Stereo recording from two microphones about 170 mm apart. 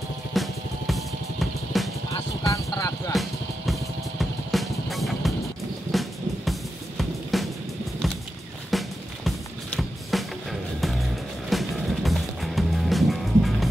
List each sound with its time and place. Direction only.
0.3 s music: centre (ahead or behind)
2.4 s a sound: 20° left (ahead or behind)
4.2 s music: centre (ahead or behind)
8.6 s music: centre (ahead or behind)